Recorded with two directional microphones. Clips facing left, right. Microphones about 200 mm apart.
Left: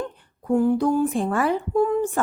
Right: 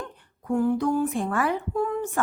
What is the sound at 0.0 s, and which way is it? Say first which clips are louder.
A woman's voice: left 7 dB; 30° left (ahead or behind).